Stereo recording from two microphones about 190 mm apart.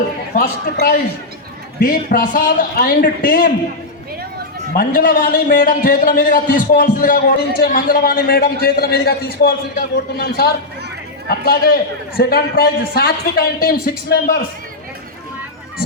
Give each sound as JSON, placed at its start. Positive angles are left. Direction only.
{"t": 0.3, "sound": "a man's voice", "side_deg": 45}
{"t": 1.8, "sound": "a man's voice", "side_deg": 50}
{"t": 4.8, "sound": "a man's voice", "side_deg": 45}